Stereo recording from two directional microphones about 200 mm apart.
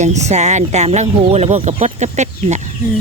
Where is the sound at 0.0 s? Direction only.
35° right (ahead or behind).